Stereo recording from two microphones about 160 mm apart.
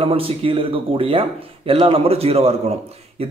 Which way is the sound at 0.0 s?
35° right (ahead or behind).